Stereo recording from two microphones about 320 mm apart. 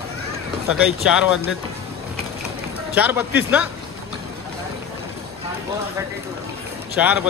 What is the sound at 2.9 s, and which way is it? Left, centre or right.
Speech, centre.